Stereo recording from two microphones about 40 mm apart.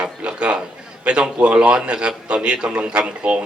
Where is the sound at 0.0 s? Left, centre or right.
Right.